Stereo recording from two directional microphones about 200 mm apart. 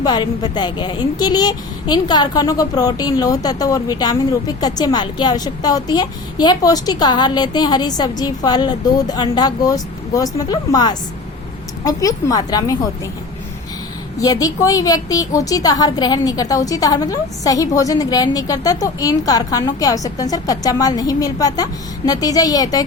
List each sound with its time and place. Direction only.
0.0 s a woman's voice: 20° left (ahead or behind)
14.2 s a woman's voice: 15° left (ahead or behind)